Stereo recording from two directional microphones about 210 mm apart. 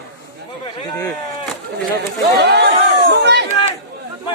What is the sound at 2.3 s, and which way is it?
Speech, 50° right (ahead or behind).